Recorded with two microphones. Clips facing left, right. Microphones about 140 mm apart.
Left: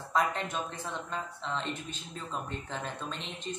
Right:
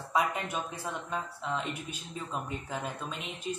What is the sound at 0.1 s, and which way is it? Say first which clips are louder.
Speech: even; 10° right (ahead or behind).